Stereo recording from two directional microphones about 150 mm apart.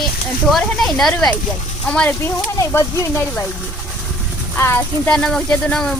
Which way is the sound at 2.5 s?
20° left (ahead or behind).